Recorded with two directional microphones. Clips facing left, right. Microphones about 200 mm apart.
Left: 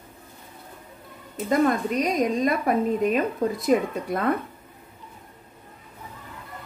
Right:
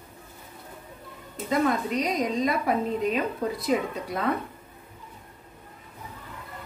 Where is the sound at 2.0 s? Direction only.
50° left (ahead or behind).